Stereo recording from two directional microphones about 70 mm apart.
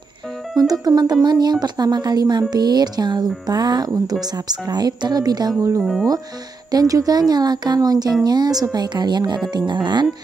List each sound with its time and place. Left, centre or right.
0.6 s a woman's voice: right
5.8 s speech: centre
6.7 s a woman's voice: right
8.7 s speech: right